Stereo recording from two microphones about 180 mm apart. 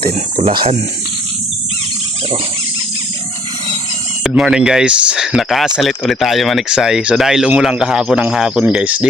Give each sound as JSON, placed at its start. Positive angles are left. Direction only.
{"t": 0.3, "sound": "speech", "side_deg": -30}
{"t": 4.2, "sound": "speech", "side_deg": 0}